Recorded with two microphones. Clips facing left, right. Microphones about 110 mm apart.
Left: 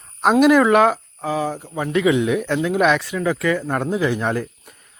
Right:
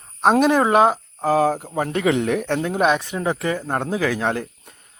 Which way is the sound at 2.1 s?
65° right (ahead or behind).